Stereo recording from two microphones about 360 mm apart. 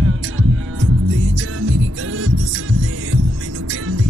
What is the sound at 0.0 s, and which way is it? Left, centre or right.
Music, right.